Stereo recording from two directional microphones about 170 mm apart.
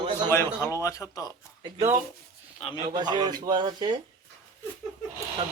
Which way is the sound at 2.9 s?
25° right (ahead or behind).